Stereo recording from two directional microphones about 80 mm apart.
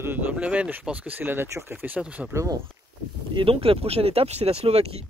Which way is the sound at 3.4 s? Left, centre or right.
Right.